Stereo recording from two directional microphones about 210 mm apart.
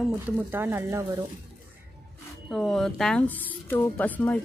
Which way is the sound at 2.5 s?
Centre (ahead or behind).